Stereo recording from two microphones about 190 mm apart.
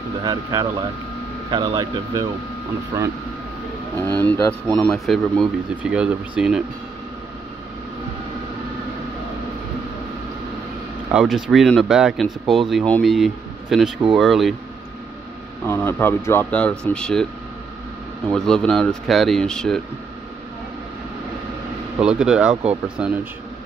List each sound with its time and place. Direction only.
0.2 s speech: 20° right (ahead or behind)
4.3 s speech: 10° left (ahead or behind)
11.1 s speech: centre (ahead or behind)
15.6 s speech: 10° left (ahead or behind)
18.3 s speech: 5° left (ahead or behind)
22.0 s speech: 5° right (ahead or behind)